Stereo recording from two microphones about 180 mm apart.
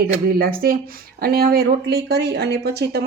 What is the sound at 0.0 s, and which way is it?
Speech, 55° right (ahead or behind).